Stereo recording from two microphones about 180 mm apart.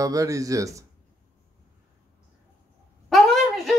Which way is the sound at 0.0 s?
20° right (ahead or behind).